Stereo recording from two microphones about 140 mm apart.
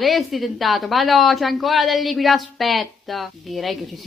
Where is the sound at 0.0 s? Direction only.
Centre (ahead or behind).